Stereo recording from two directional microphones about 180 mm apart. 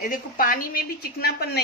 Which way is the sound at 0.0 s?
50° left (ahead or behind).